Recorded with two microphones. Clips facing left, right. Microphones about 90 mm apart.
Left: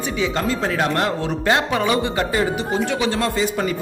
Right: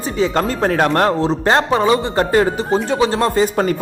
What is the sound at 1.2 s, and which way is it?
A man's voice, 35° right (ahead or behind).